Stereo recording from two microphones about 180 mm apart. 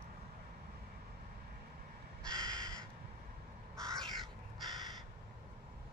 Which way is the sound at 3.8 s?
5° left (ahead or behind).